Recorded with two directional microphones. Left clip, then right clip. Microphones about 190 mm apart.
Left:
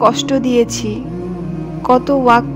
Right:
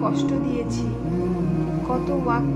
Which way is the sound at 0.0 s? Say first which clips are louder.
Left 10 dB; 55° left (ahead or behind).